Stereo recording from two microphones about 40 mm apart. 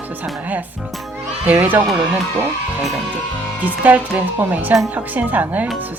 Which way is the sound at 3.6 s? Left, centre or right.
Right.